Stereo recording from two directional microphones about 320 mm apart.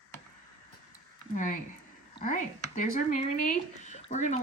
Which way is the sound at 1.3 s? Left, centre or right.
Left.